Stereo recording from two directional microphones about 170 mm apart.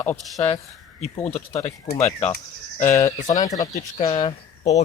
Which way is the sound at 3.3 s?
20° left (ahead or behind).